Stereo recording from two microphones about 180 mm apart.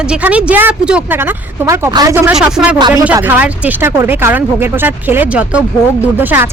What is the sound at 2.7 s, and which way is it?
Speech, 25° right (ahead or behind).